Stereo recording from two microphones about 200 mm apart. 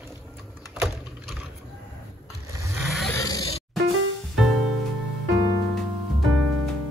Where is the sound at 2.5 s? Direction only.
15° right (ahead or behind).